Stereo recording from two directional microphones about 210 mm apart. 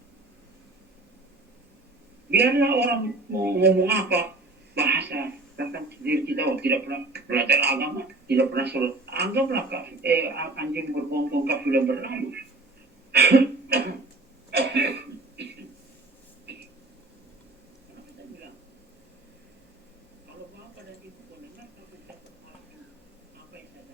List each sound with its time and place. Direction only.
2.3 s speech: 50° right (ahead or behind)
13.1 s cough: 50° right (ahead or behind)
14.5 s a sound: 55° right (ahead or behind)